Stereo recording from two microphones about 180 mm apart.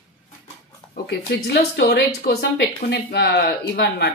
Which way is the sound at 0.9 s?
65° left (ahead or behind).